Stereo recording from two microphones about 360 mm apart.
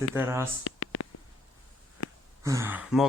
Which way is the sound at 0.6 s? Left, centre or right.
Left.